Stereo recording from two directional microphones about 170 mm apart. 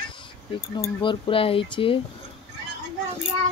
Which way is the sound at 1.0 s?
30° left (ahead or behind).